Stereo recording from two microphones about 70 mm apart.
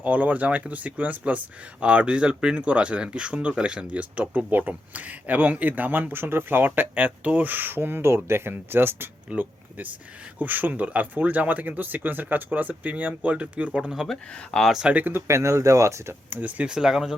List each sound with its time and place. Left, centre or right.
0.0 s speech: right
14.1 s speech: centre
14.7 s speech: centre
14.9 s speech: right
15.3 s speech: right
16.3 s speech: centre